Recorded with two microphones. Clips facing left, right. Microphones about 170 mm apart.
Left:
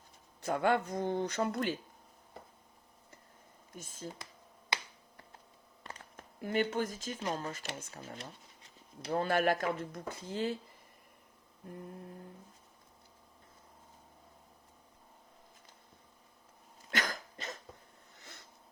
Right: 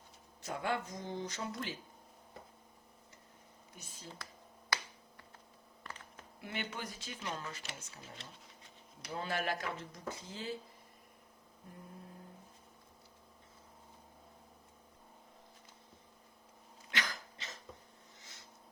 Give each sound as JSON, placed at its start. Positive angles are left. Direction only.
{"t": 0.4, "sound": "speech", "side_deg": 55}
{"t": 3.7, "sound": "speech", "side_deg": 45}
{"t": 6.4, "sound": "speech", "side_deg": 45}
{"t": 16.9, "sound": "cough", "side_deg": 50}